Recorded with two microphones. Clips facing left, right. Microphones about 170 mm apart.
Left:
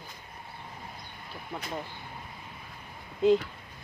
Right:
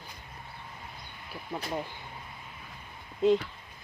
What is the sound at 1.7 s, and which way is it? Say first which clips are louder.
Speech: right 2 dB; 15° right (ahead or behind).